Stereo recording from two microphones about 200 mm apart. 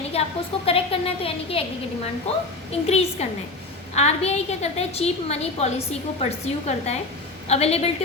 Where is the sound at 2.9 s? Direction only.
30° left (ahead or behind).